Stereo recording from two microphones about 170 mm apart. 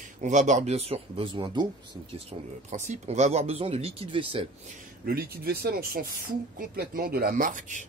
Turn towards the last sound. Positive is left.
turn(degrees=-50)  # may be behind; listen again after turning